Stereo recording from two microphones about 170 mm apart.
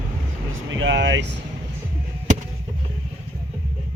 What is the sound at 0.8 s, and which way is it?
Speech, 90° right.